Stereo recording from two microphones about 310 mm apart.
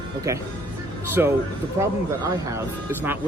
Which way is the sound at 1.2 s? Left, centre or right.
Centre.